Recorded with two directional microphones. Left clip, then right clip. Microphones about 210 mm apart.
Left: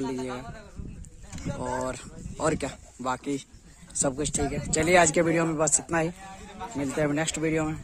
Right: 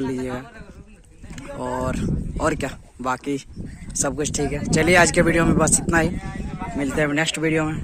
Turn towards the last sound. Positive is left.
turn(degrees=5)  # may be behind; listen again after turning